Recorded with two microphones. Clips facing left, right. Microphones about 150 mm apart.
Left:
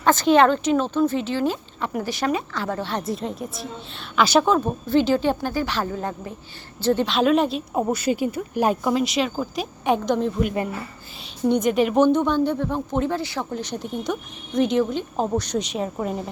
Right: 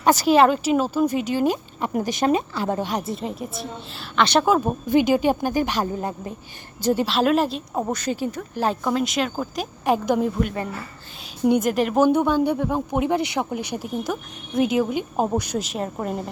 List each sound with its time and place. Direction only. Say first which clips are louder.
0.0 s speech: even; 10° right (ahead or behind)
3.1 s speech: left 1 dB; centre (ahead or behind)
4.4 s speech: right 1 dB; 10° right (ahead or behind)
11.4 s speech: even; 5° right (ahead or behind)